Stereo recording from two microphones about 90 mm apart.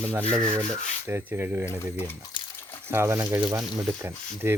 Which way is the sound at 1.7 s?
30° left (ahead or behind).